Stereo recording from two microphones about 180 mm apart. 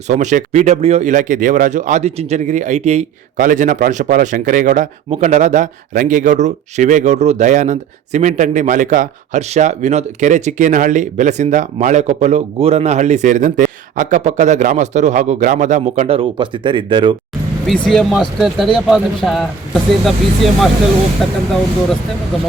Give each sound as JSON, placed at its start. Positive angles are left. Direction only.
{"t": 0.1, "sound": "speech", "side_deg": -40}
{"t": 17.8, "sound": "speech", "side_deg": 0}